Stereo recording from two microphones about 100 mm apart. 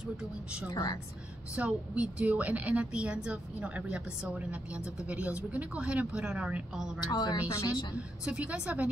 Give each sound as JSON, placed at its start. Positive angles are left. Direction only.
{"t": 0.2, "sound": "speech", "side_deg": -10}
{"t": 7.1, "sound": "speech", "side_deg": 45}
{"t": 7.4, "sound": "speech", "side_deg": 30}
{"t": 8.3, "sound": "speech", "side_deg": -10}